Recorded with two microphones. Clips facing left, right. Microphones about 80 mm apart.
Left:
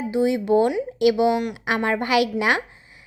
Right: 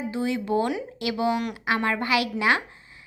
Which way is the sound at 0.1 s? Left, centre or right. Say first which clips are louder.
Left 7 dB; centre.